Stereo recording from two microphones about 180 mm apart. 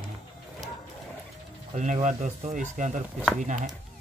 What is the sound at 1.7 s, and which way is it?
Speech, 45° right (ahead or behind).